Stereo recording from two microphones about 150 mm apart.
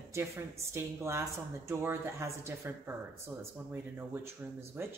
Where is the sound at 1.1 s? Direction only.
20° right (ahead or behind).